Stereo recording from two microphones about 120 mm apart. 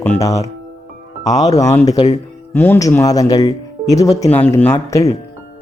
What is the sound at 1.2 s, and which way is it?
Speech, 30° left (ahead or behind).